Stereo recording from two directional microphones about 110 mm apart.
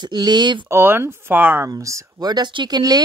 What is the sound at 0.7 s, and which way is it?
Speech, 20° right (ahead or behind).